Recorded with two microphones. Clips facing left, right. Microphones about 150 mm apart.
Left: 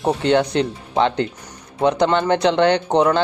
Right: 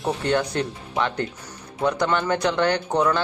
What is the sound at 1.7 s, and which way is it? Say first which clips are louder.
A man's voice: left 5 dB; 25° left (ahead or behind).